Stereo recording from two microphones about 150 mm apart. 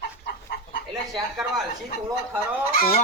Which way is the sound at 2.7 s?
75° left (ahead or behind).